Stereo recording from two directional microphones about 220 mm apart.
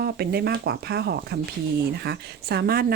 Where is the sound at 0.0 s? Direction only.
45° right (ahead or behind).